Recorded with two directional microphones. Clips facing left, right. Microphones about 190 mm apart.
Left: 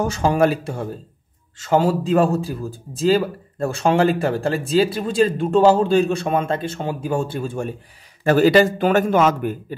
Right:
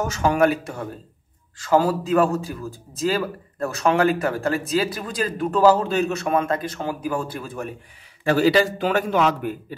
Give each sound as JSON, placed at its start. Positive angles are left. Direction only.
{"t": 0.0, "sound": "a man's voice", "side_deg": 30}
{"t": 8.2, "sound": "a man's voice", "side_deg": 50}